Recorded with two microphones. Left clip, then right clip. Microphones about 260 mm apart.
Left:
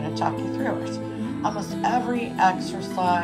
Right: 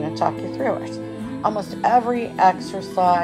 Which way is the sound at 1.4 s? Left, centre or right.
Right.